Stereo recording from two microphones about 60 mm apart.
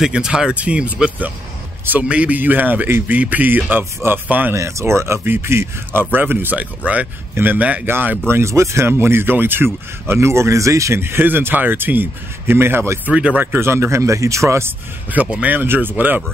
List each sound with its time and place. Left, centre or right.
0.0 s a man's voice: centre; by 4.6 s right
4.6 s speech: right
6.1 s a man's voice: right
8.3 s speech: right
10.0 s speech: right
11.0 s speech: right
13.1 s a man's voice: centre
13.6 s speech: right
15.2 s a man's voice: centre
15.5 s speech: right